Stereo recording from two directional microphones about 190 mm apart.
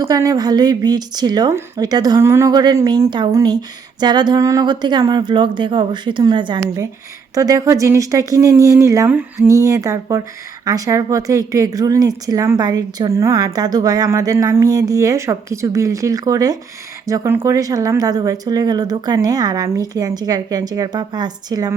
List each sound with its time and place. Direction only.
0.0 s speech: 20° right (ahead or behind)